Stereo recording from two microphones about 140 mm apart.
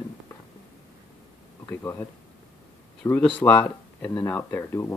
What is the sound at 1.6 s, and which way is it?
Speech, 20° left (ahead or behind).